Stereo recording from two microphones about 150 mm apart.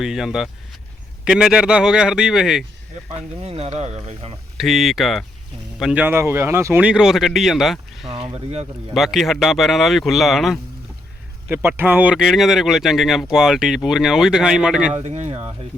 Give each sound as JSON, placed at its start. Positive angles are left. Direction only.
{"t": 0.0, "sound": "speech", "side_deg": -5}
{"t": 3.4, "sound": "speech", "side_deg": -45}
{"t": 4.5, "sound": "speech", "side_deg": 0}
{"t": 6.8, "sound": "speech", "side_deg": -5}
{"t": 8.0, "sound": "speech", "side_deg": -40}
{"t": 8.9, "sound": "speech", "side_deg": 0}
{"t": 11.4, "sound": "speech", "side_deg": -15}
{"t": 14.9, "sound": "speech", "side_deg": -50}